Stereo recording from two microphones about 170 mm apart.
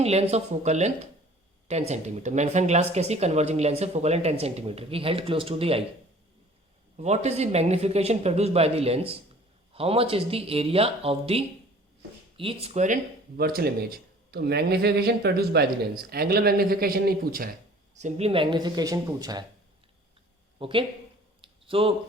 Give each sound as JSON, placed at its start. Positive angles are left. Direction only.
{"t": 0.0, "sound": "speech", "side_deg": -40}
{"t": 6.9, "sound": "speech", "side_deg": -40}
{"t": 13.3, "sound": "speech", "side_deg": -65}
{"t": 17.9, "sound": "speech", "side_deg": -40}
{"t": 20.6, "sound": "speech", "side_deg": -30}
{"t": 21.4, "sound": "a sound", "side_deg": -35}